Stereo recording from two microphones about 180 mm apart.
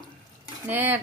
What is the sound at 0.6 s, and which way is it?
Speech, 10° right (ahead or behind).